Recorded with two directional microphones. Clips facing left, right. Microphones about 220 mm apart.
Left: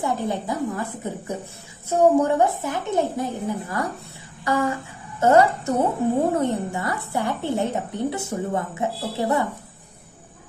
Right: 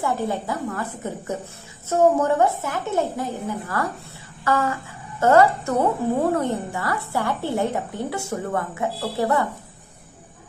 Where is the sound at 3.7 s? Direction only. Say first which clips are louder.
Right 1 dB; 20° left (ahead or behind).